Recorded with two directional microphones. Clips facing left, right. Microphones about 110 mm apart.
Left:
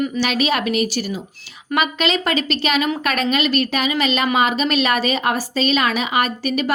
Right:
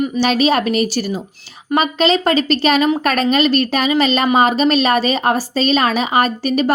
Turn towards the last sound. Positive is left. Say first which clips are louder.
# right 5 dB
turn(degrees=-35)  # may be behind; listen again after turning